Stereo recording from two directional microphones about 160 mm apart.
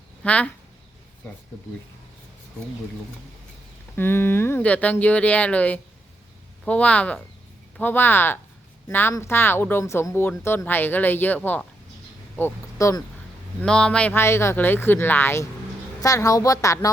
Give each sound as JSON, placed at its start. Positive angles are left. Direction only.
{"t": 0.2, "sound": "speech", "side_deg": 10}
{"t": 3.9, "sound": "speech", "side_deg": 15}
{"t": 13.6, "sound": "a woman's voice", "side_deg": 5}